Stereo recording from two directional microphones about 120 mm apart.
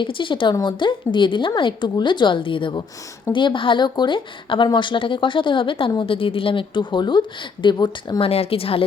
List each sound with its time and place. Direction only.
0.0 s a woman's voice: 45° left (ahead or behind)
8.3 s speech: 55° left (ahead or behind)